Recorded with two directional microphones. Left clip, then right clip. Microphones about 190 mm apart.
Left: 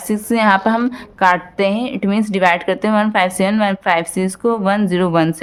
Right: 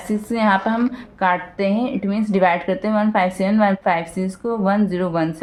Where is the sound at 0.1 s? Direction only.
45° left (ahead or behind).